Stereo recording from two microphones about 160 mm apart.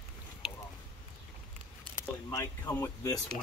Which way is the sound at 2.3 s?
15° left (ahead or behind).